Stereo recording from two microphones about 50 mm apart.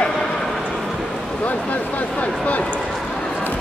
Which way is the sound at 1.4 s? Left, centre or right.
Left.